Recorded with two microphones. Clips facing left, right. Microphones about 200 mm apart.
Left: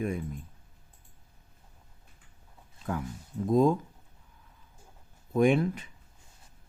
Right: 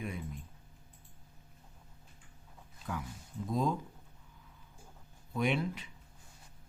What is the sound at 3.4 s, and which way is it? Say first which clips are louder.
Speech: left 10 dB; 50° left (ahead or behind).